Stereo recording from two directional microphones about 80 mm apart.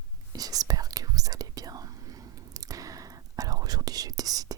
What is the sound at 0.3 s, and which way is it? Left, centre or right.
Whispering, right.